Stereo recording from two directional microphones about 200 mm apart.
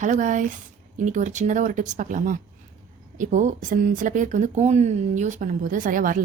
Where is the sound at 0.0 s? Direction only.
40° right (ahead or behind).